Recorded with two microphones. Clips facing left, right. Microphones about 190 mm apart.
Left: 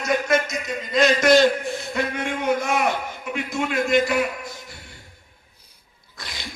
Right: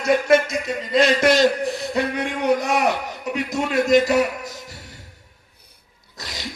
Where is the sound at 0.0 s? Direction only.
30° right (ahead or behind).